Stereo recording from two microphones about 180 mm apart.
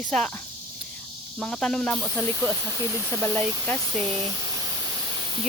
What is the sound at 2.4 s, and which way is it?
Cricket, 10° right (ahead or behind).